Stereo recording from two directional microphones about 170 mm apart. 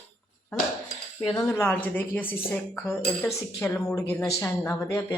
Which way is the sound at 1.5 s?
10° left (ahead or behind).